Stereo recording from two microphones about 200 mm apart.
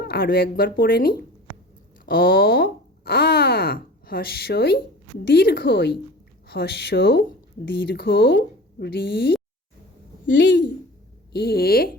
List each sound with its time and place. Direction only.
0.0 s speech: 50° left (ahead or behind)
2.0 s a sound: 50° left (ahead or behind)
5.2 s a woman's voice: 55° left (ahead or behind)
10.2 s a woman's voice: 65° left (ahead or behind); by 11.9 s 50° left (ahead or behind)